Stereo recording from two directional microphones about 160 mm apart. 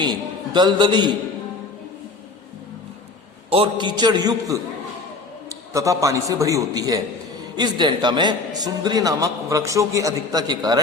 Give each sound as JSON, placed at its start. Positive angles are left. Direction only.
{"t": 0.0, "sound": "a man's voice", "side_deg": -30}
{"t": 3.5, "sound": "a man's voice", "side_deg": -30}